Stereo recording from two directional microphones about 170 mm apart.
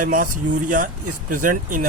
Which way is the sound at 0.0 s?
55° right (ahead or behind).